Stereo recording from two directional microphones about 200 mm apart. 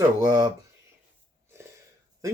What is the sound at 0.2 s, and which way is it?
Speech, 20° right (ahead or behind).